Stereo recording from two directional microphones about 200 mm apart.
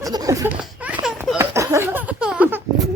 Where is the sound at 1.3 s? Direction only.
15° right (ahead or behind).